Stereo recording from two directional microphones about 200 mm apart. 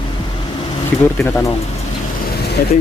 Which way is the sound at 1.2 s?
10° left (ahead or behind).